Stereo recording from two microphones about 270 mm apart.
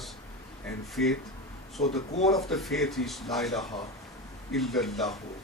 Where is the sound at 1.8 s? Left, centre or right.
Left.